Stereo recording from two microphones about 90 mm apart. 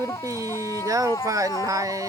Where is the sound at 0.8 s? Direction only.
40° right (ahead or behind).